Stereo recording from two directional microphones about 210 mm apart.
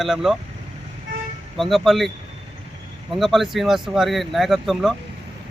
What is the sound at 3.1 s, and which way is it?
Speech, centre (ahead or behind).